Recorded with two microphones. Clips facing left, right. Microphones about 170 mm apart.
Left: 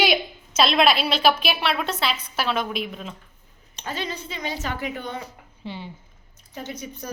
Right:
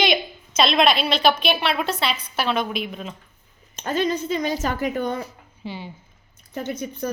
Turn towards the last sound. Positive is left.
turn(degrees=-55)  # may be behind; listen again after turning